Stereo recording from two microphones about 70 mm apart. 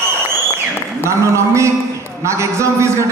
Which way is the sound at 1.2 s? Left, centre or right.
Right.